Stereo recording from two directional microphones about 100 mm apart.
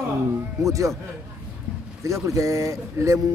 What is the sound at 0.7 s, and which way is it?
Speech, 35° right (ahead or behind).